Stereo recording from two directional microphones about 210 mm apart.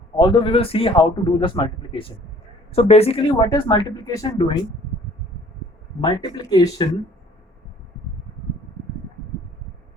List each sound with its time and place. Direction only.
0.2 s a man's voice: 25° left (ahead or behind)
6.0 s a man's voice: 20° left (ahead or behind)